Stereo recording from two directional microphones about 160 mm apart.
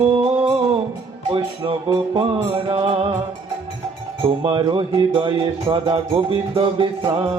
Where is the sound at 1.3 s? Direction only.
30° right (ahead or behind).